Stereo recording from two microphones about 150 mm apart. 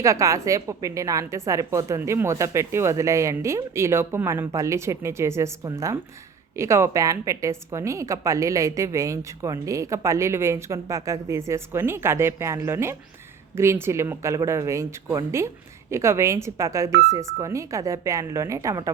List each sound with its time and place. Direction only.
0.0 s a woman's voice: 20° right (ahead or behind)